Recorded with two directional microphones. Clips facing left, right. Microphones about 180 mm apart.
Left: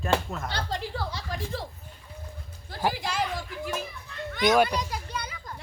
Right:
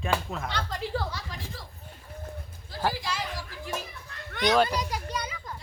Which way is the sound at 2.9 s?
55° left (ahead or behind).